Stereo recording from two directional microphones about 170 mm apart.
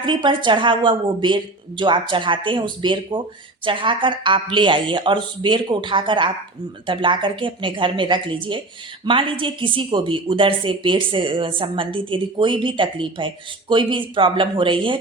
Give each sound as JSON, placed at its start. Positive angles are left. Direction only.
{"t": 0.0, "sound": "a woman's voice", "side_deg": -30}